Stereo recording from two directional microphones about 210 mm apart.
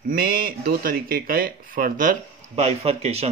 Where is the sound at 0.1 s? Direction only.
45° right (ahead or behind).